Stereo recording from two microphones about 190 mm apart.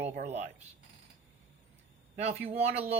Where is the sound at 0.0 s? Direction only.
35° right (ahead or behind).